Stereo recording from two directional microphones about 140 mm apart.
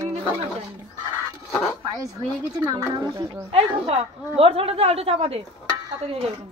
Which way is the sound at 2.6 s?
30° right (ahead or behind).